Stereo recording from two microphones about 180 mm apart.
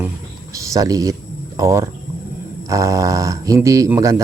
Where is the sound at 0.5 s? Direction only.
20° right (ahead or behind).